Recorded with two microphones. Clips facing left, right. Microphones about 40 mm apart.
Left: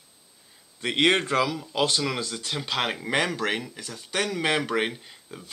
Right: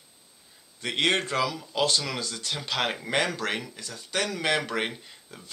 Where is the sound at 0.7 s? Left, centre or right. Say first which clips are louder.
Left 3 dB; left.